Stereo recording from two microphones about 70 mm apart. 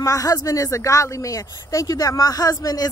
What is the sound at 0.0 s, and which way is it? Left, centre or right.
Speech, left.